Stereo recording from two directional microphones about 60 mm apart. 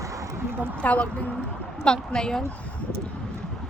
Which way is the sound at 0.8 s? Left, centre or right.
Left.